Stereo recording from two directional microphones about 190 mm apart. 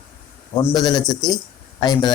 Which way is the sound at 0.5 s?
20° left (ahead or behind).